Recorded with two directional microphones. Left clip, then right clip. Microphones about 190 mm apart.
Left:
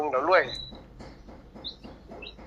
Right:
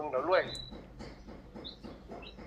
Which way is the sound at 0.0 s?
55° left (ahead or behind).